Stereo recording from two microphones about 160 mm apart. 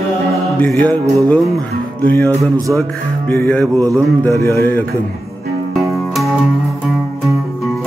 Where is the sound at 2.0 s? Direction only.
10° left (ahead or behind).